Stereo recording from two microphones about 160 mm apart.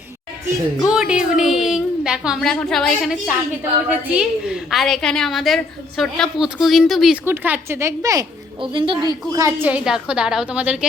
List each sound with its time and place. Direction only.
0.9 s a woman's voice: 5° right (ahead or behind)
7.3 s a woman's voice: 10° right (ahead or behind); by 9.1 s 30° right (ahead or behind)
9.3 s a woman's voice: 20° right (ahead or behind)